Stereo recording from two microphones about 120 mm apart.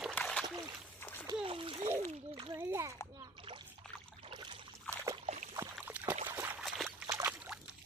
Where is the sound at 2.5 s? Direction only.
20° right (ahead or behind).